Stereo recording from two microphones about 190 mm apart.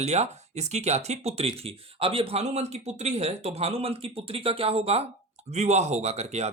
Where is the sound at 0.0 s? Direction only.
35° right (ahead or behind).